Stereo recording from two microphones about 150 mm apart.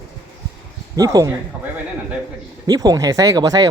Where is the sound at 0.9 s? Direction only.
25° right (ahead or behind).